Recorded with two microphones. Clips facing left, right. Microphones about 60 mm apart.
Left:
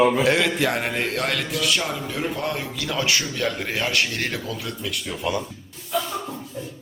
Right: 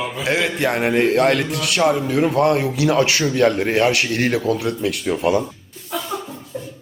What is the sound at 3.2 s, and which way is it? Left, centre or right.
Speech, right.